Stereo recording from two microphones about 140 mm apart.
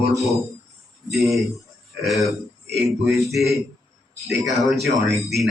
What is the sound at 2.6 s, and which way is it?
Speech, 20° right (ahead or behind).